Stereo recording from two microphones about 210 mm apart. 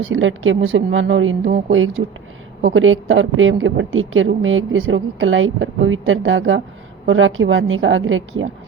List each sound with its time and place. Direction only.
0.0 s a woman's voice: 70° right (ahead or behind)